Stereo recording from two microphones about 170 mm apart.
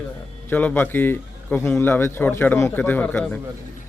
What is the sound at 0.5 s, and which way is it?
Speech, 10° left (ahead or behind).